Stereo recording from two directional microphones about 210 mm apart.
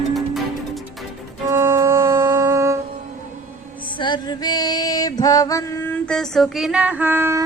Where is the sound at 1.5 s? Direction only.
15° right (ahead or behind).